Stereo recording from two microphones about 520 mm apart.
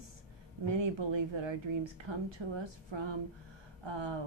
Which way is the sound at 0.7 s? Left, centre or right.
Right.